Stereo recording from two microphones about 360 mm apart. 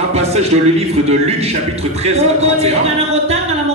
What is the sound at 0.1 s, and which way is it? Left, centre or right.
A man's voice, centre.